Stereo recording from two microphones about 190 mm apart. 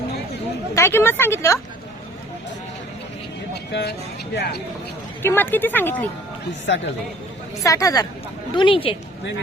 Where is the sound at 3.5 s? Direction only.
60° left (ahead or behind).